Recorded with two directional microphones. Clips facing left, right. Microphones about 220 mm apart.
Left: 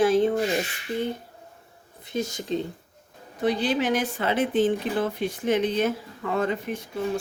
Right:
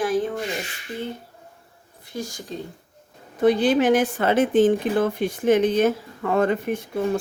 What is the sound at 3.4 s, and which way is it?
Speech, 50° right (ahead or behind).